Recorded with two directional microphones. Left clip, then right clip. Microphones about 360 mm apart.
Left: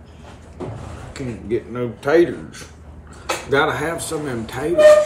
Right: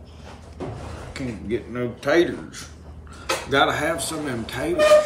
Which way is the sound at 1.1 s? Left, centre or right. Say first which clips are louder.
Left 4 dB; centre.